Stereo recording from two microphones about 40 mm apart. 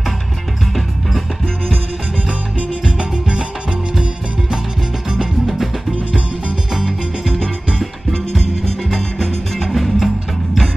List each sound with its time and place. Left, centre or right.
2.8 s music: centre
6.7 s music: centre
7.3 s music: centre